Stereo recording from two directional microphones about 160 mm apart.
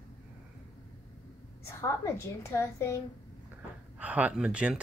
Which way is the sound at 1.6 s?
15° left (ahead or behind).